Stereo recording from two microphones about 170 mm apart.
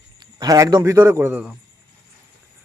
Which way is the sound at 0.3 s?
20° right (ahead or behind).